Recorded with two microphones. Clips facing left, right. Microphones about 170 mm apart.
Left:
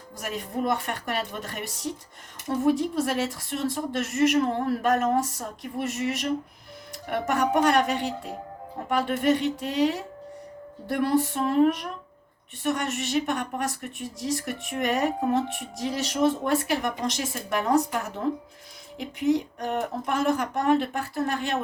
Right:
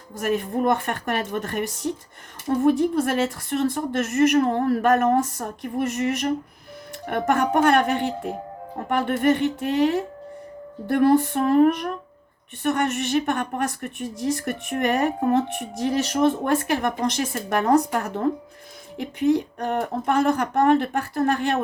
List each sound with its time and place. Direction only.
0.2 s a woman's voice: 55° right (ahead or behind)